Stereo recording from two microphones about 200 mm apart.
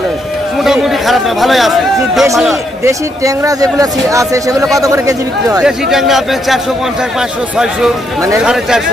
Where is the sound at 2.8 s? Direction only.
15° right (ahead or behind).